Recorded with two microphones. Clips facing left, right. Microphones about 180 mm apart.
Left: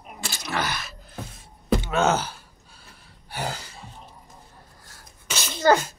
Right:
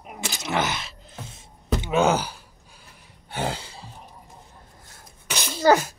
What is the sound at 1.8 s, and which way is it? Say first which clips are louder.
Gasp: right 5 dB; 15° right (ahead or behind).